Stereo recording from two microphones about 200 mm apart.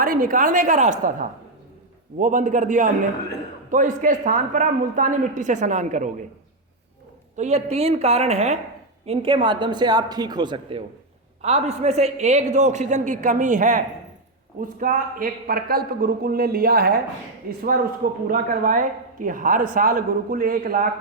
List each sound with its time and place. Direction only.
0.0 s a woman's voice: 45° right (ahead or behind)
7.3 s a woman's voice: 35° right (ahead or behind); by 17.0 s 50° right (ahead or behind)
18.3 s speech: 45° right (ahead or behind)